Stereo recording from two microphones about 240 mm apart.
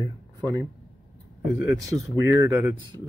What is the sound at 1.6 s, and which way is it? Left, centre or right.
Speech, centre.